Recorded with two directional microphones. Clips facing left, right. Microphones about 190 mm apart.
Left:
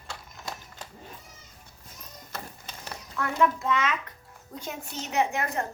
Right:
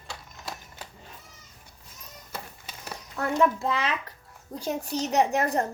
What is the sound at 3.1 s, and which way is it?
A child's voice, 35° right (ahead or behind).